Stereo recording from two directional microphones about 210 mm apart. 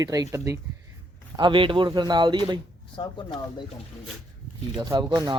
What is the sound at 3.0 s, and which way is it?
Speech, 20° left (ahead or behind).